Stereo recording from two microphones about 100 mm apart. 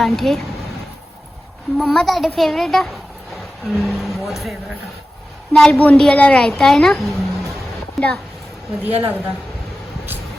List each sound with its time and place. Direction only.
0.0 s a child's voice: centre (ahead or behind)
1.8 s a child's voice: 5° left (ahead or behind)
5.5 s a woman's voice: 5° left (ahead or behind)
8.8 s a woman's voice: 20° right (ahead or behind)